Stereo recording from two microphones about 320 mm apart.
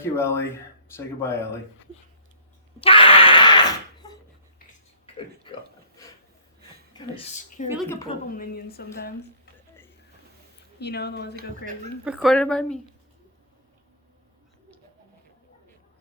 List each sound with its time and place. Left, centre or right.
0.0 s speech: centre
2.8 s a sound: centre
6.9 s a woman's voice: centre
10.8 s speech: left
12.0 s a woman's voice: centre